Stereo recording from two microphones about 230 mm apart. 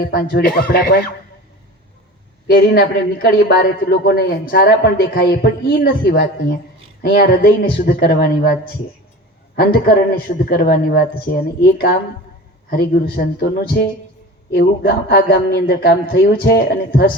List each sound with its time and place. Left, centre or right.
0.0 s speech: left
2.5 s a man's voice: left